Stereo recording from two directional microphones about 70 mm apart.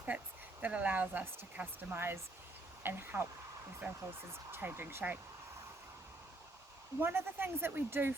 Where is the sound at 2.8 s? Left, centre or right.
Right.